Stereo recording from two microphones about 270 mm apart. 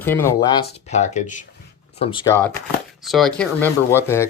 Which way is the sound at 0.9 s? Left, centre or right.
Left.